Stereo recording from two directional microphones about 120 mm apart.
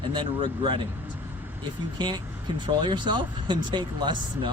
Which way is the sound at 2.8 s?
40° right (ahead or behind).